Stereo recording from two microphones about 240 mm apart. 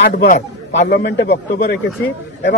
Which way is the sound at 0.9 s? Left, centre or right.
Left.